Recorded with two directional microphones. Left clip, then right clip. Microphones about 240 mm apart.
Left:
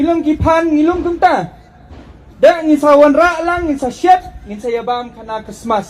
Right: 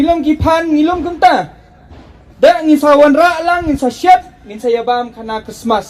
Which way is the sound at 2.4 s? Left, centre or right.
Centre.